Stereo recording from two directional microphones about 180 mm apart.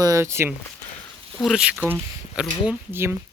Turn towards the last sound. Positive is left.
turn(degrees=-15)  # may be behind; listen again after turning